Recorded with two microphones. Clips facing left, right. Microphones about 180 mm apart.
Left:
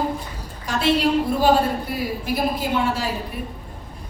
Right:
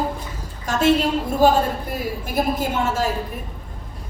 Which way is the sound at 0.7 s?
45° right (ahead or behind).